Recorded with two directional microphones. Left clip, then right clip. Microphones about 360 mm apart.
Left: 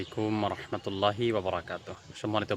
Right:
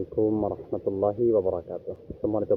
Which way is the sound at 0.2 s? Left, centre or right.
Left.